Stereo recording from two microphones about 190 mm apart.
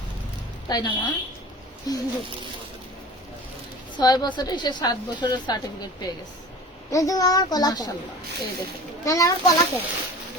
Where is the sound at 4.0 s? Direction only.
20° left (ahead or behind).